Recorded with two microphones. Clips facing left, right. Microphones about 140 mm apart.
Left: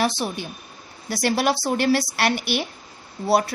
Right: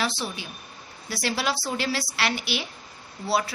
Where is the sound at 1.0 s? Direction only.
45° left (ahead or behind).